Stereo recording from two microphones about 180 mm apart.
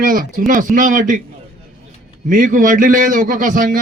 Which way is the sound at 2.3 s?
45° right (ahead or behind).